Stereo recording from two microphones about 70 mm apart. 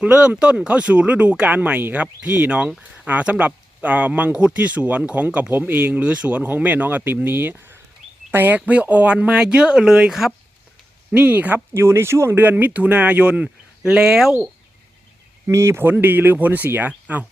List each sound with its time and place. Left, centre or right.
0.0 s speech: centre
11.1 s speech: right
11.8 s speech: right
12.4 s speech: right; by 14.3 s centre
15.4 s speech: right